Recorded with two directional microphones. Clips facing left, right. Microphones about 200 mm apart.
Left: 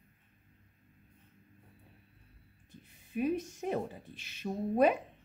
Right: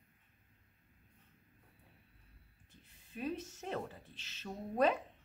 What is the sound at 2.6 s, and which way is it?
Speech, 15° left (ahead or behind).